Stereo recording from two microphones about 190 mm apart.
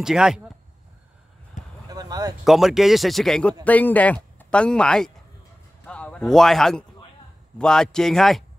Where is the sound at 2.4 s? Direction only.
Centre (ahead or behind).